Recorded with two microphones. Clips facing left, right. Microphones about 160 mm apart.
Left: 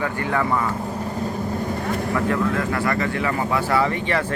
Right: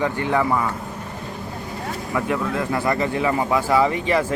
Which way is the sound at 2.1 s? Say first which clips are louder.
Even; 15° right (ahead or behind).